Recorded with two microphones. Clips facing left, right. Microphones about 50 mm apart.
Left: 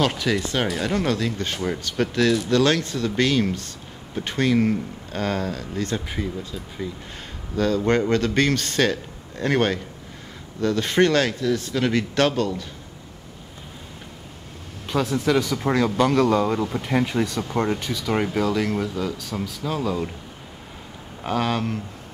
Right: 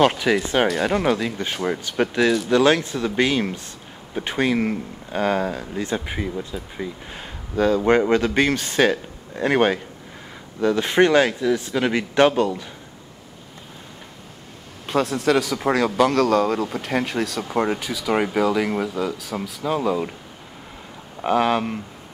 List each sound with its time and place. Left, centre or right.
0.0 s speech: centre
14.9 s speech: centre
21.2 s speech: centre